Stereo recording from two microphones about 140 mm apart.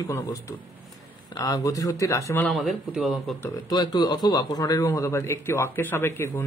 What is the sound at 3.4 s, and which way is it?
A man's voice, 30° left (ahead or behind).